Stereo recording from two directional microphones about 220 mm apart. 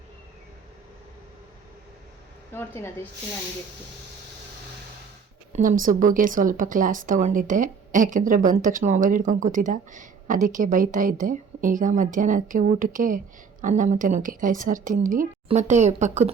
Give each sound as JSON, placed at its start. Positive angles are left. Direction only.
{"t": 2.5, "sound": "speech", "side_deg": 10}
{"t": 5.5, "sound": "speech", "side_deg": -40}